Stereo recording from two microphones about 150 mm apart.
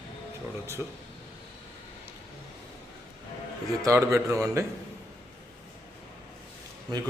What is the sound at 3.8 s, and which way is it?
Speech, 20° right (ahead or behind).